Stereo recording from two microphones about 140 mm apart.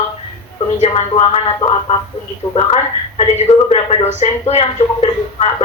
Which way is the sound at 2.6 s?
45° left (ahead or behind).